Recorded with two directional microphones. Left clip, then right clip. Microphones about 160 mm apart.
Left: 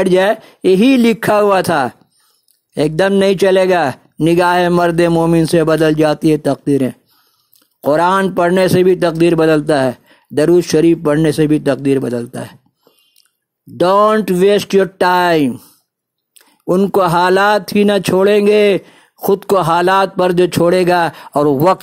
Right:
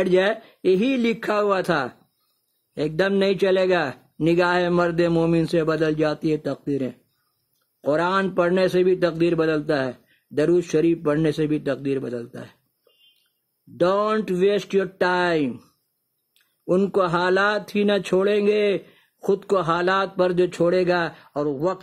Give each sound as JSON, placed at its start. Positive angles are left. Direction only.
{"t": 0.0, "sound": "speech", "side_deg": 35}
{"t": 13.7, "sound": "speech", "side_deg": 40}
{"t": 16.3, "sound": "a sound", "side_deg": 35}
{"t": 16.9, "sound": "speech", "side_deg": 40}